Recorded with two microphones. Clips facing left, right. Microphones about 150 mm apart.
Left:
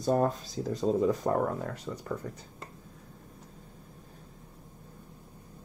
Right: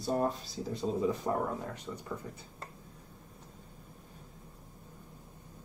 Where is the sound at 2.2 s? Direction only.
60° left (ahead or behind).